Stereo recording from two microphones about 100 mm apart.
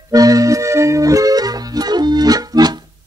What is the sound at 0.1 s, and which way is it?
Accordion, 35° right (ahead or behind).